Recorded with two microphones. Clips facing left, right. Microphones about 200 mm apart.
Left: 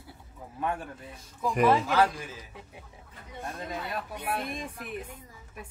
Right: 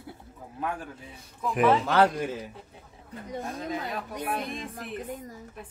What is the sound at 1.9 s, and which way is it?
Speech, 60° right (ahead or behind).